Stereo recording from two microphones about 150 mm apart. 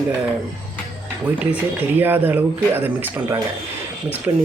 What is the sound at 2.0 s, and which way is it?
Speech, 10° right (ahead or behind).